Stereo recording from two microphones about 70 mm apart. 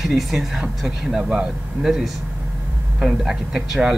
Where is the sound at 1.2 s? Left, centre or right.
Centre.